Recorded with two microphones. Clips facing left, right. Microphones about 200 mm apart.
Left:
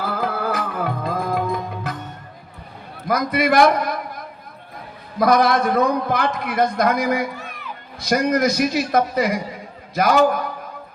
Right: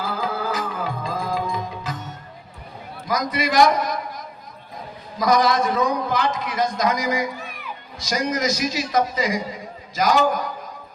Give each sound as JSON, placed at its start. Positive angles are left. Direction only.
{"t": 0.0, "sound": "music", "side_deg": 60}
{"t": 3.1, "sound": "a man's voice", "side_deg": 60}